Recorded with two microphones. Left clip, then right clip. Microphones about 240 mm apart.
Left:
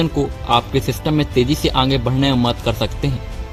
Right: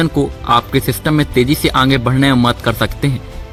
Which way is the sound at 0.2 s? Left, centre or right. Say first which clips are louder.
Right 4 dB; right.